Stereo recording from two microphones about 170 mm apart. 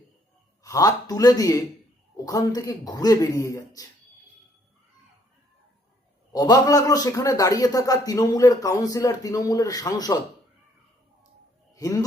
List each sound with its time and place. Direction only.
0.6 s a man's voice: 20° left (ahead or behind)
6.3 s a man's voice: 20° left (ahead or behind)
11.7 s a sound: 20° left (ahead or behind)